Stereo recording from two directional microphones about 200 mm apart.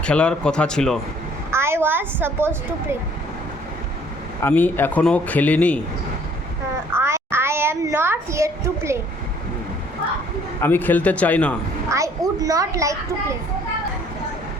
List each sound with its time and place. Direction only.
0.0 s speech: 5° left (ahead or behind)
1.5 s a woman's voice: 10° right (ahead or behind)
4.4 s a man's voice: 10° left (ahead or behind)
6.9 s a sound: 10° right (ahead or behind)
10.6 s a man's voice: 10° left (ahead or behind)
11.9 s a child's voice: 15° right (ahead or behind)